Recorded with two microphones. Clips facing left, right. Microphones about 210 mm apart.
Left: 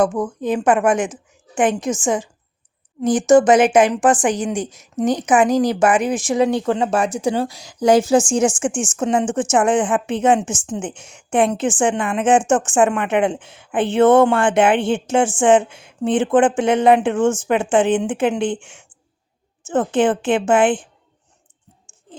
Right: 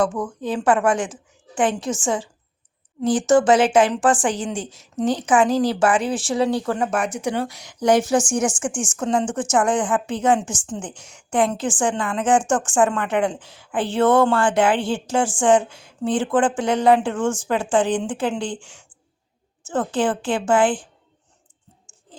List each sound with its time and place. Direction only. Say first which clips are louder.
0.0 s a woman's voice: left 4 dB; 20° left (ahead or behind)